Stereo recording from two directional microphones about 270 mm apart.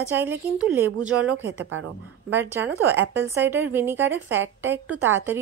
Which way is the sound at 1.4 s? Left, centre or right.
Right.